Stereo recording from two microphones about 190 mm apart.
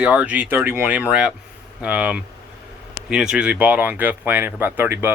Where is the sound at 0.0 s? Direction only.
5° right (ahead or behind).